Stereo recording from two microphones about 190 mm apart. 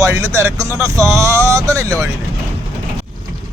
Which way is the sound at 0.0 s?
15° right (ahead or behind).